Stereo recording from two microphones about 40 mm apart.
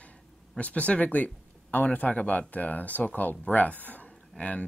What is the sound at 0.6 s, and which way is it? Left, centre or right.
Speech, left.